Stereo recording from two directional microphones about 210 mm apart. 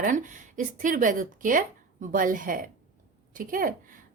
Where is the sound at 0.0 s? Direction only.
40° right (ahead or behind).